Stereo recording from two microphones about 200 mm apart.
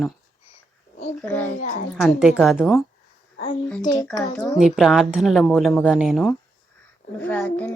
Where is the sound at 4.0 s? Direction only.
15° left (ahead or behind).